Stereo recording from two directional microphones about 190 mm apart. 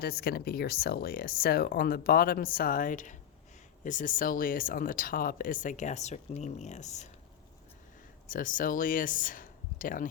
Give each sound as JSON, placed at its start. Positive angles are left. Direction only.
{"t": 0.0, "sound": "speech", "side_deg": 55}
{"t": 8.3, "sound": "speech", "side_deg": 45}